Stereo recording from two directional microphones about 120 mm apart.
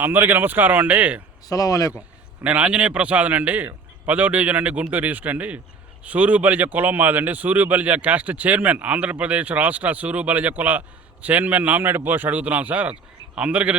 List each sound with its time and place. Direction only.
0.0 s a man's voice: 15° right (ahead or behind)
1.5 s speech: 30° left (ahead or behind)
2.4 s a man's voice: 10° right (ahead or behind)